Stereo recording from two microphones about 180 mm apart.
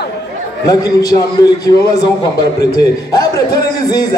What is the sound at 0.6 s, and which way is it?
A man's voice, 20° left (ahead or behind).